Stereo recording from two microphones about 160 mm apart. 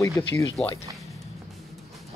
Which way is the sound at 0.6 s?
5° left (ahead or behind).